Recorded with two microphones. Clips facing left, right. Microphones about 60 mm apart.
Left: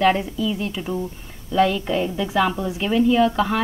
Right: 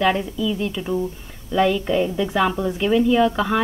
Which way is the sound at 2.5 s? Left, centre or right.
Centre.